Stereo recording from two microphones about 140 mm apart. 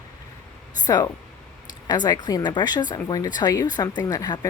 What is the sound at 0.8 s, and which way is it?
Speech, 25° left (ahead or behind).